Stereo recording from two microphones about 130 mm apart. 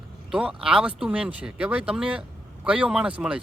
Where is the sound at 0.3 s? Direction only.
5° right (ahead or behind).